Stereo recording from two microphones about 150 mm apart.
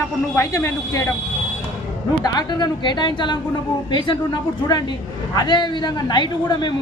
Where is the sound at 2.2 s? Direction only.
25° left (ahead or behind).